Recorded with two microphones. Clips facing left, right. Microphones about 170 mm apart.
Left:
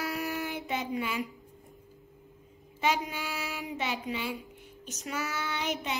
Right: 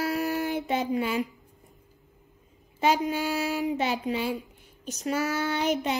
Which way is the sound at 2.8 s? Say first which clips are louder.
Right 6 dB; 35° right (ahead or behind).